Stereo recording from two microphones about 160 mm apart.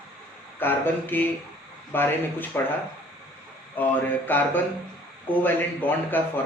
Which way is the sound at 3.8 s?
10° left (ahead or behind).